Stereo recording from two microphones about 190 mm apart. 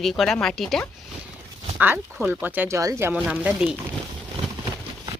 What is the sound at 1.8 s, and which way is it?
Speech, 10° right (ahead or behind).